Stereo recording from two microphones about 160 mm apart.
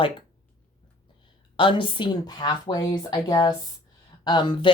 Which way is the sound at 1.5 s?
30° left (ahead or behind).